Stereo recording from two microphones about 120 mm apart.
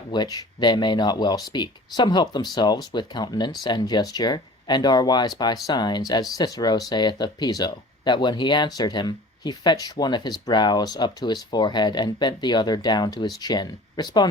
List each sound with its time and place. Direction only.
0.1 s speech: 35° left (ahead or behind)